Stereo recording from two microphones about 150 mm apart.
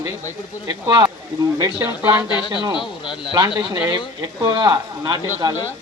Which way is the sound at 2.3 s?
30° left (ahead or behind).